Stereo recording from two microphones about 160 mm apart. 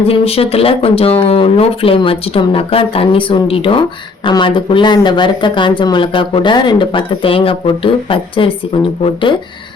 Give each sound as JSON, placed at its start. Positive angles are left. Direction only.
{"t": 0.1, "sound": "speech", "side_deg": 40}